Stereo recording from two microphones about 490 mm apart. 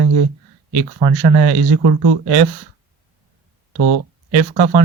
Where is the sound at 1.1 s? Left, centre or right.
Centre.